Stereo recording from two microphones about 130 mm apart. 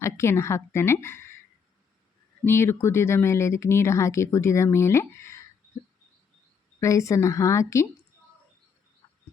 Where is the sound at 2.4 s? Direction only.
20° left (ahead or behind).